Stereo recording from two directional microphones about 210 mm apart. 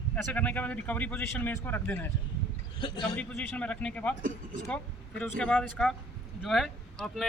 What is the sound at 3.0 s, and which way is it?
Speech, 5° left (ahead or behind).